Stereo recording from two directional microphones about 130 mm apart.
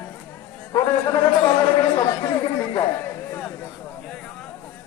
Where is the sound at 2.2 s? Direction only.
35° left (ahead or behind).